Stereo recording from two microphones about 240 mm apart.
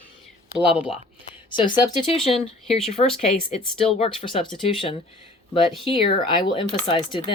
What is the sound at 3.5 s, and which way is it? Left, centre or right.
Speech, left.